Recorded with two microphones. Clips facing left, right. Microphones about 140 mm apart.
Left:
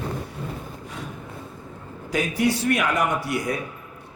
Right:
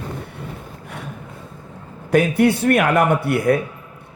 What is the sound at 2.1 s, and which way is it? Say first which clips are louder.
A man's voice: right 7 dB; 60° right (ahead or behind).